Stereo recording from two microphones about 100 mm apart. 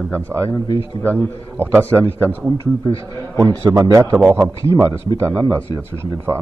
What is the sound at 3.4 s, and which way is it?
A man's voice, 35° right (ahead or behind).